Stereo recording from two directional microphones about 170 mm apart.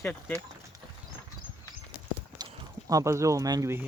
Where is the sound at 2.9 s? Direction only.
20° right (ahead or behind).